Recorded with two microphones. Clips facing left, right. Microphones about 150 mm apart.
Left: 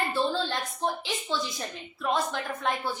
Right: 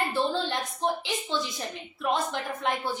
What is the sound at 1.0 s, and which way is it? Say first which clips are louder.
A woman's voice: right 1 dB; 20° right (ahead or behind).